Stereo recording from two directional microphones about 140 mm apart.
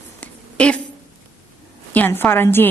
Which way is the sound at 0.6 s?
10° left (ahead or behind).